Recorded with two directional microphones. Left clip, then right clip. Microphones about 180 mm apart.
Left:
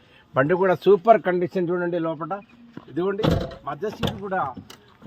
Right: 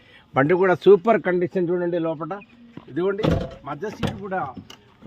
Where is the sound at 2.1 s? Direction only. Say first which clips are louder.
Left 1 dB; 35° right (ahead or behind).